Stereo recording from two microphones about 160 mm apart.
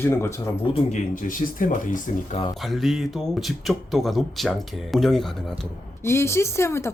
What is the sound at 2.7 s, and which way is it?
Speech, centre (ahead or behind).